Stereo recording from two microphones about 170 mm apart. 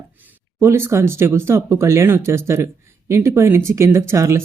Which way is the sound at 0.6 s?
15° right (ahead or behind).